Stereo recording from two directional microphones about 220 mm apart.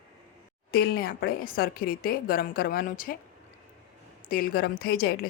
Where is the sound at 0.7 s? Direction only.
45° left (ahead or behind).